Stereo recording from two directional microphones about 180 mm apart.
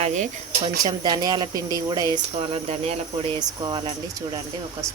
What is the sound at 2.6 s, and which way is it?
Speech, 35° right (ahead or behind).